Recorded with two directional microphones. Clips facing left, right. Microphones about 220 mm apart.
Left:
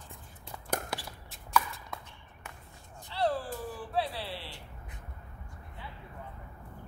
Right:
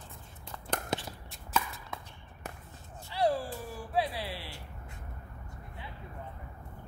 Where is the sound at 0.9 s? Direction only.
20° right (ahead or behind).